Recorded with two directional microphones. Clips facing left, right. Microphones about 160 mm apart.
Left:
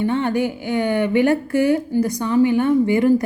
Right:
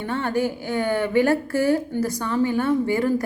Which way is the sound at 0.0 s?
20° left (ahead or behind).